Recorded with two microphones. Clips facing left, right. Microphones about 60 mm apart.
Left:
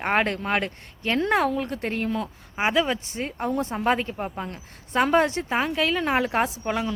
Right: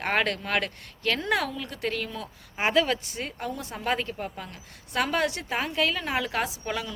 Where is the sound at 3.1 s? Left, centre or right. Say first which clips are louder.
Left 7 dB; left.